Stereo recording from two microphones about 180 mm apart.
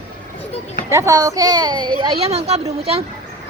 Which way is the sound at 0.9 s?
15° right (ahead or behind).